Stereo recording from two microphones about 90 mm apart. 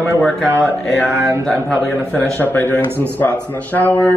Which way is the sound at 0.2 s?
5° left (ahead or behind).